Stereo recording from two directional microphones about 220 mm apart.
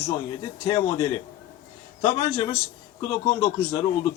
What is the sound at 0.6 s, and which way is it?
Speech, 20° left (ahead or behind).